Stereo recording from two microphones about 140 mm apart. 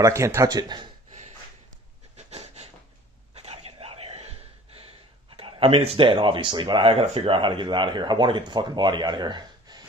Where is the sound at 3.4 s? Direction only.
45° right (ahead or behind).